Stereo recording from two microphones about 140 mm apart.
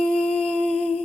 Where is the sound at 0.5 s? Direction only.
55° right (ahead or behind).